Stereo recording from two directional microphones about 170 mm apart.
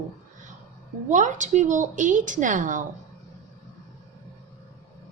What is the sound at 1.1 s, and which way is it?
A woman's voice, 45° right (ahead or behind).